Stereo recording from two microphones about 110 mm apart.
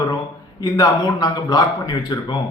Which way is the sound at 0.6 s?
35° left (ahead or behind).